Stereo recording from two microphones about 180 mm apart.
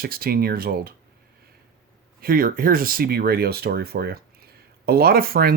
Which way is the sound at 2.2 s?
55° right (ahead or behind).